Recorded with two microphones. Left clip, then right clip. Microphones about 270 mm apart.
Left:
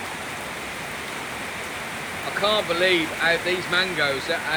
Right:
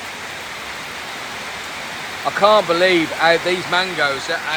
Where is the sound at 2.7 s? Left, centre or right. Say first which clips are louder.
Right 5 dB; right.